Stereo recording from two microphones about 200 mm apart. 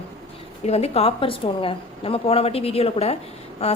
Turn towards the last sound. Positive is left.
turn(degrees=30)  # may be behind; listen again after turning